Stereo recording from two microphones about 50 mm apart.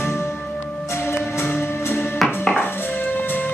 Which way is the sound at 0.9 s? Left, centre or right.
Left.